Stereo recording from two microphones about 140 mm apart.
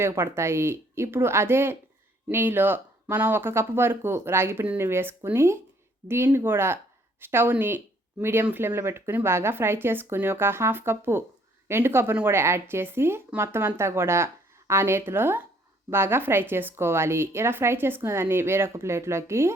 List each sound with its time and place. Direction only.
0.0 s a woman's voice: 20° right (ahead or behind)